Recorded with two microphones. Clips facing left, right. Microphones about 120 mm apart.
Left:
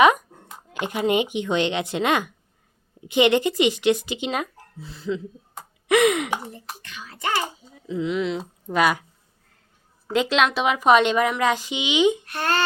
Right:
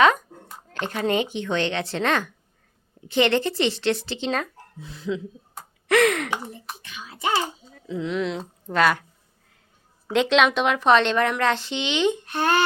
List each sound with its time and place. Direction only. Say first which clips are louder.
0.7 s a woman's voice: left 2 dB; 15° left (ahead or behind)
4.8 s speech: left 1 dB; centre (ahead or behind)
5.5 s a sound: even; 10° left (ahead or behind)
6.5 s a child's voice: even; 15° right (ahead or behind)
7.7 s speech: left 6 dB; 5° left (ahead or behind)
10.1 s a woman's voice: right 2 dB; 5° left (ahead or behind)
12.3 s speech: right 3 dB; 15° right (ahead or behind)